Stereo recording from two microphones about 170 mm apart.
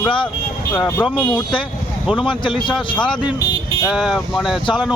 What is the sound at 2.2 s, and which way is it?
Speech, 30° left (ahead or behind).